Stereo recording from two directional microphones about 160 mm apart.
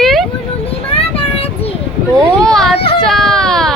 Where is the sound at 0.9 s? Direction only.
35° left (ahead or behind).